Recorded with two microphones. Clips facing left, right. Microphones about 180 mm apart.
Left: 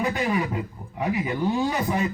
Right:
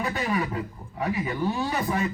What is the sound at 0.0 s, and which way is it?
A man's voice, 15° left (ahead or behind).